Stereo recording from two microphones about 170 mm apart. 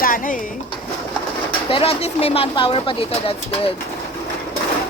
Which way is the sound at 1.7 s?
35° left (ahead or behind).